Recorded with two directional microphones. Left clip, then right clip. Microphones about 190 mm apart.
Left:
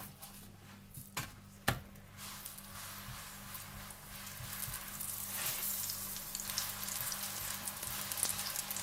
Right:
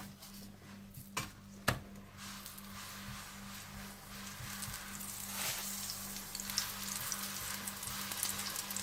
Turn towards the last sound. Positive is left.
turn(degrees=5)  # may be behind; listen again after turning